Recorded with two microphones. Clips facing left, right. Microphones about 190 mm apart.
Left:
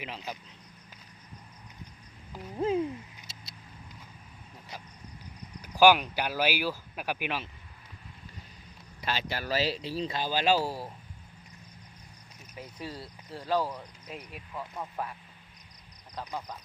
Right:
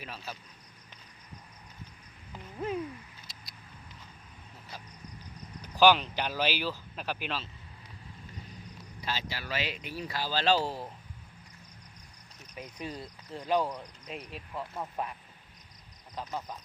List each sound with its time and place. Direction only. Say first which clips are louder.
0.0 s speech: left 3 dB; 15° left (ahead or behind)
2.6 s cat: left 6 dB; 25° left (ahead or behind)
5.6 s speech: left 2 dB; 10° left (ahead or behind)
9.0 s speech: left 4 dB; 65° left (ahead or behind)
9.4 s speech: left 6 dB; 35° left (ahead or behind); by 10.9 s 10° left (ahead or behind)
12.5 s speech: right 1 dB; 20° right (ahead or behind)
15.0 s speech: even; 20° right (ahead or behind)
16.2 s speech: even; 15° right (ahead or behind)